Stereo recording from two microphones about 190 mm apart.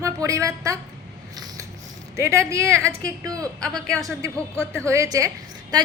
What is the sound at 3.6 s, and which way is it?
Speech, 5° left (ahead or behind).